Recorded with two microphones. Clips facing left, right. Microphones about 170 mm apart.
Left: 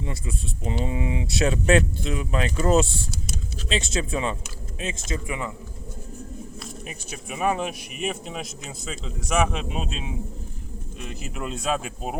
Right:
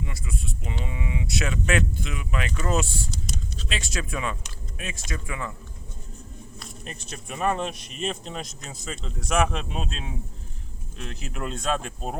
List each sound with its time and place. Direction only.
0.0 s speech: 30° left (ahead or behind)
6.6 s speech: 5° left (ahead or behind)